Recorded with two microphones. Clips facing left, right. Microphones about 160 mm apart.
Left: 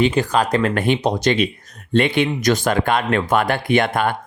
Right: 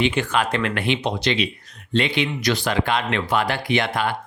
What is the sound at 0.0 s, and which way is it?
Speech, 35° left (ahead or behind).